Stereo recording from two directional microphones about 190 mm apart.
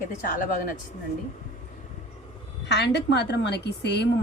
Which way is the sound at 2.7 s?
60° left (ahead or behind).